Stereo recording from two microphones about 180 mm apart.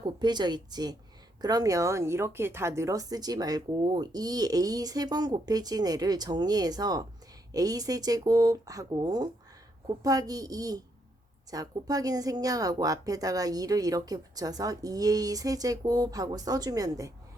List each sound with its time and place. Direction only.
0.0 s speech: 25° right (ahead or behind)